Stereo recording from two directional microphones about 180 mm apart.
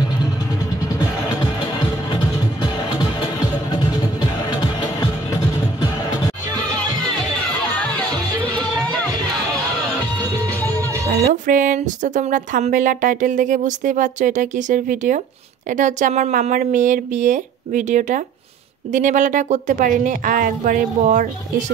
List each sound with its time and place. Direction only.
3.7 s music: 25° left (ahead or behind)
11.4 s speech: 45° right (ahead or behind)